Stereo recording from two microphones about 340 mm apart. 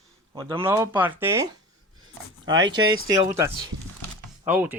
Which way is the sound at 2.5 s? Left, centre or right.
Centre.